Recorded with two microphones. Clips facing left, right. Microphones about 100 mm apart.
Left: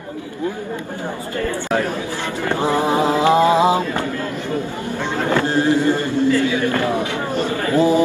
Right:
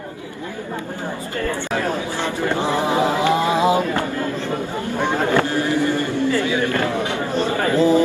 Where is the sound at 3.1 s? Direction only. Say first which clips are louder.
Left 4 dB; 25° left (ahead or behind).